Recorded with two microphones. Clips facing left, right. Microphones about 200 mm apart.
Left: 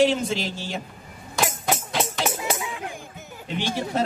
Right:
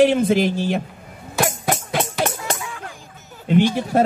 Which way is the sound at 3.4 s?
55° right (ahead or behind).